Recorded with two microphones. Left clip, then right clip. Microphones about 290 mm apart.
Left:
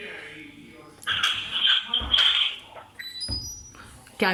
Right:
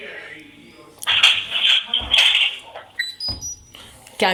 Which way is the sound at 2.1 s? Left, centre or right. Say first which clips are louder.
Right 5 dB; right.